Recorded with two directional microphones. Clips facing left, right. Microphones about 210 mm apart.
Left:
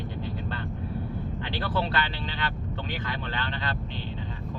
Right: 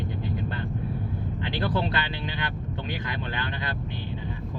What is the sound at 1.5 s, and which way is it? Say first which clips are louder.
Speech: right 1 dB; 15° right (ahead or behind).